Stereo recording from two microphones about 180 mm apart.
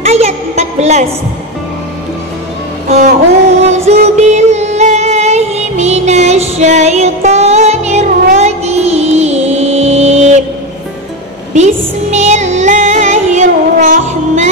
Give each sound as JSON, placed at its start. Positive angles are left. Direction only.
{"t": 0.0, "sound": "a sound", "side_deg": -35}
{"t": 2.9, "sound": "music", "side_deg": -45}
{"t": 9.8, "sound": "mantra", "side_deg": -35}
{"t": 11.5, "sound": "music", "side_deg": -40}